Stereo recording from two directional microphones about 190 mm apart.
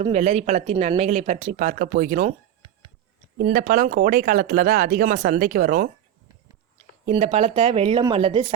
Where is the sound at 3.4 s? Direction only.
50° right (ahead or behind).